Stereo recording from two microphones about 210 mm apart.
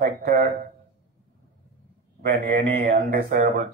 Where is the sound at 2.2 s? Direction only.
45° right (ahead or behind).